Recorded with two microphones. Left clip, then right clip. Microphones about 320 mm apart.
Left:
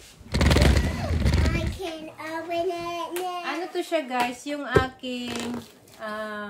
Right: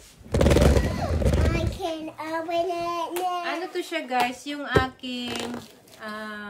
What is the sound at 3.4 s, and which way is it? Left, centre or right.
A woman's voice, centre.